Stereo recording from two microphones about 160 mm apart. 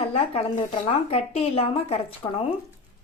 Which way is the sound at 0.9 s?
40° left (ahead or behind).